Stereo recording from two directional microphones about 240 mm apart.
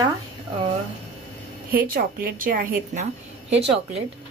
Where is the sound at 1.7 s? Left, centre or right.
Right.